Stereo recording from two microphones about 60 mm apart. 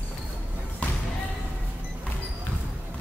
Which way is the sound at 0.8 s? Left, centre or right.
Left.